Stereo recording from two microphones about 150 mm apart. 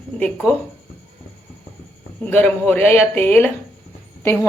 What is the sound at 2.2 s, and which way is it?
Speech, 10° left (ahead or behind).